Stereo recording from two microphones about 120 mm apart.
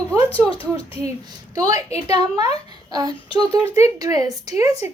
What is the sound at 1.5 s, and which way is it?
Speech, 30° right (ahead or behind).